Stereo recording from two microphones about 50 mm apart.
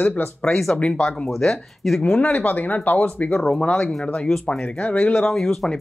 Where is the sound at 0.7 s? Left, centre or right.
Left.